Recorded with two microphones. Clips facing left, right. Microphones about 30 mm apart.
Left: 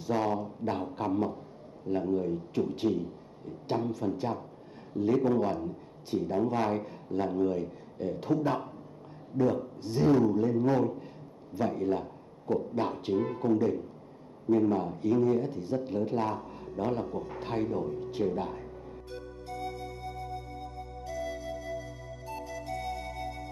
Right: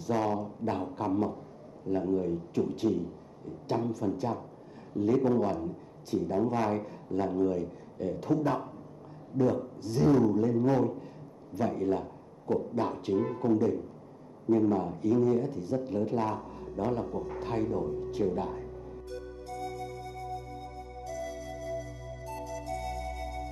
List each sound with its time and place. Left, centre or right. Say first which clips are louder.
0.1 s a sound: even; centre
0.7 s a man's voice: even; centre
6.0 s a man's voice: even; left
6.3 s a man's voice: even; centre
10.7 s a man's voice: even; centre
11.5 s a man's voice: even; left
18.3 s music: right 1 dB; left
21.1 s music: left 2 dB; left